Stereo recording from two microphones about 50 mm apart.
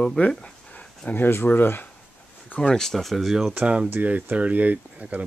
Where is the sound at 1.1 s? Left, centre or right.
Left.